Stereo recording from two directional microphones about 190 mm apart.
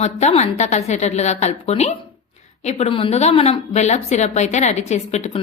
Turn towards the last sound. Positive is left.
turn(degrees=35)  # may be behind; listen again after turning